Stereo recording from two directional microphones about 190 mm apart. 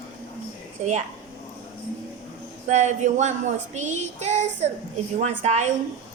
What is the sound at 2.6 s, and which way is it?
Child singing, 40° right (ahead or behind).